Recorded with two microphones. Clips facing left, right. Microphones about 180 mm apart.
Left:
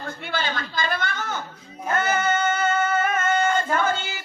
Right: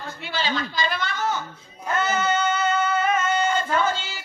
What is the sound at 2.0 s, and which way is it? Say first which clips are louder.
Music: even; 50° left (ahead or behind).